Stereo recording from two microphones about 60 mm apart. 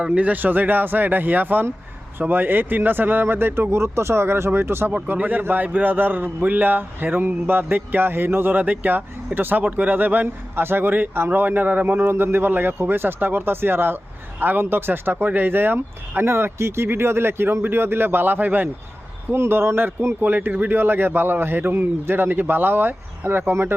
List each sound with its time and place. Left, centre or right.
0.0 s speech: right
5.0 s speech: right
11.9 s speech: right
19.3 s speech: right
20.2 s speech: right